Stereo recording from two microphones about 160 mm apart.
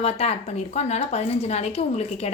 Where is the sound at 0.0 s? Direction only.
40° left (ahead or behind).